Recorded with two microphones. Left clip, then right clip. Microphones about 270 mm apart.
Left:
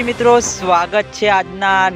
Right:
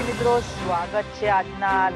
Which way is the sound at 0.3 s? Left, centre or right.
Left.